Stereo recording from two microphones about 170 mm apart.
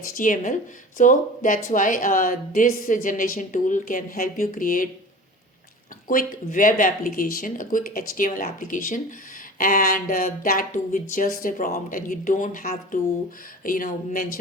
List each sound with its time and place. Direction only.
0.2 s speech: 50° left (ahead or behind)
6.1 s speech: 55° left (ahead or behind)